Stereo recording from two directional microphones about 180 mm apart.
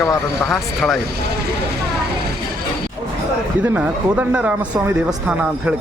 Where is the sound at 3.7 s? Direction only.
10° right (ahead or behind).